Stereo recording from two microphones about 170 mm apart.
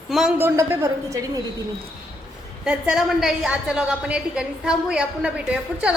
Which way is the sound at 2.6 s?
5° right (ahead or behind).